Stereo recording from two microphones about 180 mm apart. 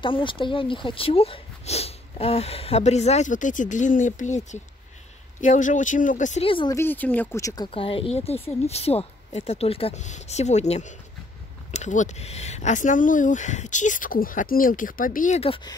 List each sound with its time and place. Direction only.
0.0 s speech: 25° left (ahead or behind); by 6.4 s 45° left (ahead or behind)
6.4 s speech: 30° left (ahead or behind)
6.7 s speech: 10° left (ahead or behind); by 15.7 s 30° left (ahead or behind)